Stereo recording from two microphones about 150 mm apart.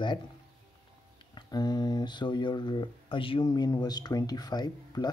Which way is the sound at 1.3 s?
25° left (ahead or behind).